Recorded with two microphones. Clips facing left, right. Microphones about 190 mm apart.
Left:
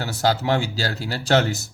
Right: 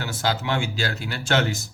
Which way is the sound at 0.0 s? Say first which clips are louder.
Left 4 dB; 40° left (ahead or behind).